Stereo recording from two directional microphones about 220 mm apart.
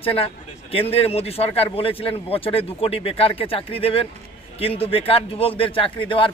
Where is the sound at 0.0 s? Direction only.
25° left (ahead or behind).